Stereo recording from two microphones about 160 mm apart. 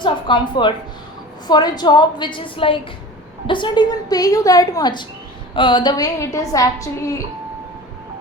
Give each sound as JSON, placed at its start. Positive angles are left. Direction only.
{"t": 0.0, "sound": "a woman's voice", "side_deg": 30}